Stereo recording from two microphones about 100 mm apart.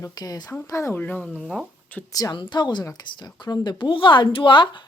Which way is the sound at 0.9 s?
15° left (ahead or behind).